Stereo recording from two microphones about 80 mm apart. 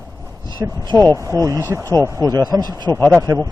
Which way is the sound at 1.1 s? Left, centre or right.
Right.